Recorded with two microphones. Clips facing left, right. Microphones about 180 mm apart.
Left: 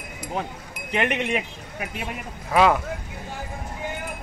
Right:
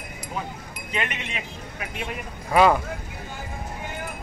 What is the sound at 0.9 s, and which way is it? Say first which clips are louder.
Speech: left 6 dB; 60° left (ahead or behind).